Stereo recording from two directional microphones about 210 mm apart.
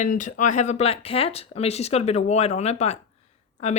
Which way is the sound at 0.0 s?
35° left (ahead or behind).